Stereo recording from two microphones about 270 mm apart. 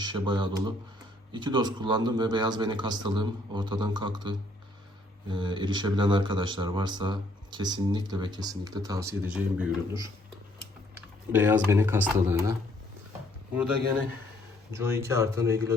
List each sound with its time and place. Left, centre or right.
0.0 s speech: centre
11.3 s speech: centre
14.7 s speech: centre